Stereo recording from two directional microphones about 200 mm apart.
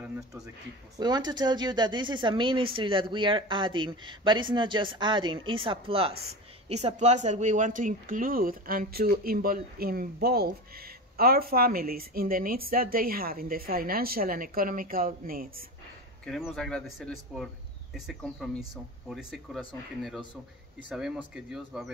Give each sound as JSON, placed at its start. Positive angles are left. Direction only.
{"t": 0.0, "sound": "a sound", "side_deg": -10}
{"t": 0.9, "sound": "speech", "side_deg": -20}
{"t": 16.3, "sound": "speech", "side_deg": 0}
{"t": 20.9, "sound": "speech", "side_deg": -5}